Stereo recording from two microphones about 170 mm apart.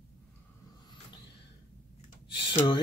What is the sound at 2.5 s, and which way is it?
Speech, 25° left (ahead or behind).